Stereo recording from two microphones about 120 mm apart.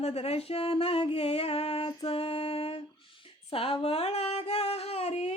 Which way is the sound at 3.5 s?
50° left (ahead or behind).